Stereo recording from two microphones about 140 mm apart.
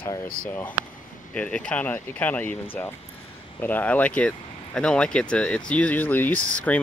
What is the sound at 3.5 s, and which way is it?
Speech, 10° left (ahead or behind).